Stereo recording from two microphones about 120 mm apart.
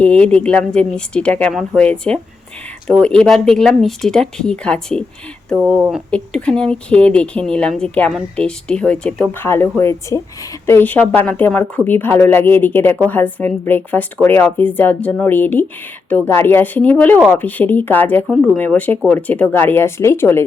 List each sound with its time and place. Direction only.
0.0 s speech: 10° left (ahead or behind)
6.1 s speech: 10° left (ahead or behind)